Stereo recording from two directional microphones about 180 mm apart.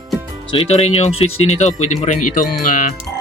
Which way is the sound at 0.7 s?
35° left (ahead or behind).